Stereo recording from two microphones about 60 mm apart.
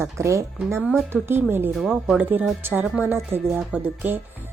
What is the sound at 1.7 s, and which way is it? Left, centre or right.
Speech, centre.